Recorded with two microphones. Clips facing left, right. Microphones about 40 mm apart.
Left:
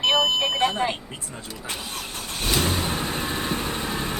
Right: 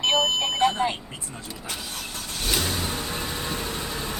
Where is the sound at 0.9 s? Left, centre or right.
Centre.